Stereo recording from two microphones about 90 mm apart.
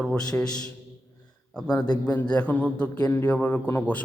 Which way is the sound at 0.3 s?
25° left (ahead or behind).